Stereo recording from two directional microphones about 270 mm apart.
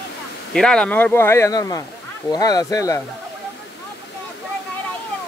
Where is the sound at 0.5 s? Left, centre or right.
Centre.